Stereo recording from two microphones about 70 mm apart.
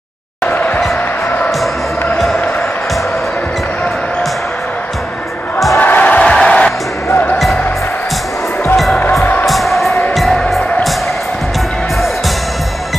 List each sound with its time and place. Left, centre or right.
5.8 s music: left
8.7 s music: centre
9.2 s music: left
9.5 s music: centre